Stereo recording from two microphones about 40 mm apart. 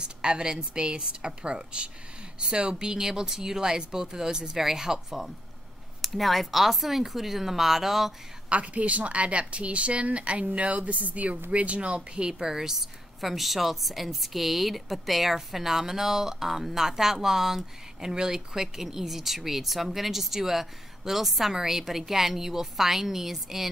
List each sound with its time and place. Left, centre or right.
0.2 s a woman's voice: centre
5.9 s speech: centre
8.5 s a woman's voice: right
12.3 s speech: centre
13.2 s speech: centre